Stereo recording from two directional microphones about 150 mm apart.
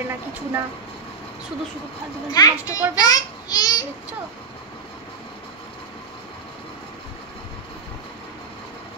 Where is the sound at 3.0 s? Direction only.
25° left (ahead or behind).